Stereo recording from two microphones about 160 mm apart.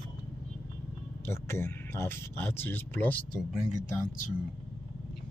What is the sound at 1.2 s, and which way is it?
Speech, 15° left (ahead or behind).